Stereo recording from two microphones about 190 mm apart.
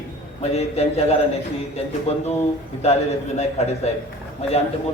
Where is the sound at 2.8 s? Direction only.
35° left (ahead or behind).